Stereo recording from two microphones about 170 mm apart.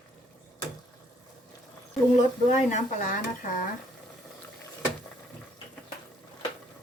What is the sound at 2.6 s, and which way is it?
Speech, 45° left (ahead or behind).